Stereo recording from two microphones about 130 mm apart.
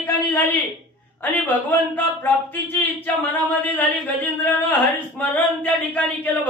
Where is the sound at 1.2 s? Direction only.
15° left (ahead or behind).